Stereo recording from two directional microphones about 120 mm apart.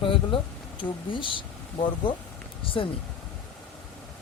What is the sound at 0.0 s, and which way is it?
Speech, 45° left (ahead or behind).